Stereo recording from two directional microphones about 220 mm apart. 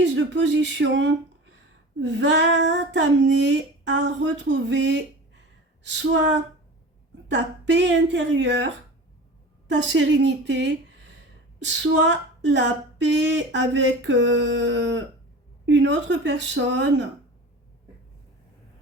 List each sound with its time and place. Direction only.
0.0 s a woman's voice: 55° right (ahead or behind)